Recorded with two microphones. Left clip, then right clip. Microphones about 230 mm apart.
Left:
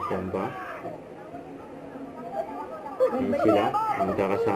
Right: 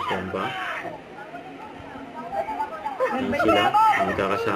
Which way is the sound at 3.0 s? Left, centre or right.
Right.